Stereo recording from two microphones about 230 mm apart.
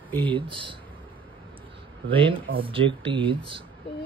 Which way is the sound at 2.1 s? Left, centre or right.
Right.